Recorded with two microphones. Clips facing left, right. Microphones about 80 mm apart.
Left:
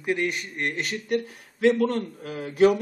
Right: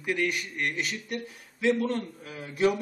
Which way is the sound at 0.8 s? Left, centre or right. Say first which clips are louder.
Left 6 dB; left.